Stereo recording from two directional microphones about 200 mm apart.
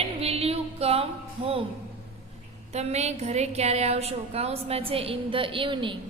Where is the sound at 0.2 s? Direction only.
30° right (ahead or behind).